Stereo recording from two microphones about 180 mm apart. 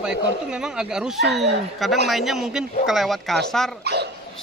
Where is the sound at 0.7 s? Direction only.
5° right (ahead or behind).